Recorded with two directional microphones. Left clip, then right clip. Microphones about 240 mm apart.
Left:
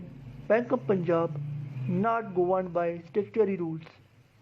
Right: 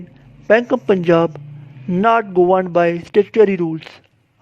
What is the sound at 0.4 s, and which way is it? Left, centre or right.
A woman's voice, right.